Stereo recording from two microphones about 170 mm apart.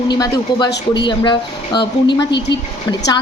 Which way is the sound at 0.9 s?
25° left (ahead or behind).